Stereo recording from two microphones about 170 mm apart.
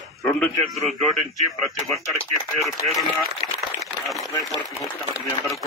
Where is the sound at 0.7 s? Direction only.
Centre (ahead or behind).